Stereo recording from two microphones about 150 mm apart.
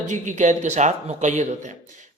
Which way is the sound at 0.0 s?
50° right (ahead or behind).